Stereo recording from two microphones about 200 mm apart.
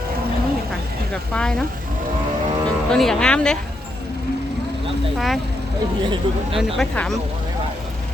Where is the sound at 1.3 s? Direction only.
5° left (ahead or behind).